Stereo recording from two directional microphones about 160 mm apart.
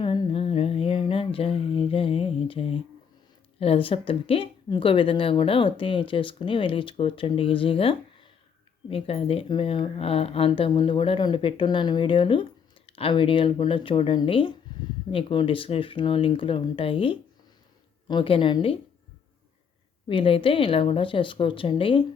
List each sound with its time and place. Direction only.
0.0 s a sound: 30° left (ahead or behind)
3.6 s speech: 35° left (ahead or behind)
20.1 s speech: 35° left (ahead or behind)